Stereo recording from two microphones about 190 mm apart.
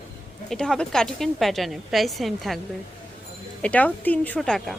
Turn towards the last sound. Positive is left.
turn(degrees=5)  # may be behind; listen again after turning